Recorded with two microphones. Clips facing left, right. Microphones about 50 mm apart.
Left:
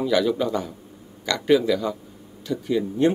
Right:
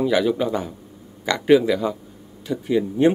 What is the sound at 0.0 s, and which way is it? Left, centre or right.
Speech, centre.